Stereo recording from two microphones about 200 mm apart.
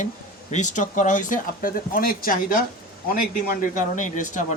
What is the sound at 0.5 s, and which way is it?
Speech, 35° left (ahead or behind).